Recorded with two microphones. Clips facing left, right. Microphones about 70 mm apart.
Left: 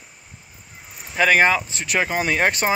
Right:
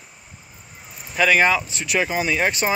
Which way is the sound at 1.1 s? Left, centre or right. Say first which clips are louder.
Left 1 dB; left.